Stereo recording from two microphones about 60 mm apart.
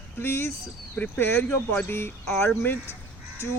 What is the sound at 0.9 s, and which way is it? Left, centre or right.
Speech, left.